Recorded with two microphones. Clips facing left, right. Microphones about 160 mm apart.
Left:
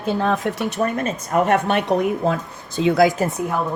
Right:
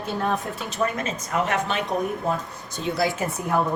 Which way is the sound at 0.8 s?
45° left (ahead or behind).